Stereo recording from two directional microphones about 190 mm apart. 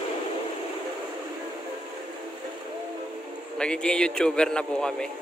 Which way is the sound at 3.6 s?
5° left (ahead or behind).